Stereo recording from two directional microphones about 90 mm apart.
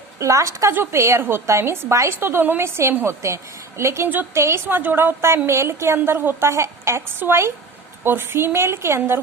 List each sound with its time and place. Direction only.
0.2 s a woman's voice: 35° right (ahead or behind)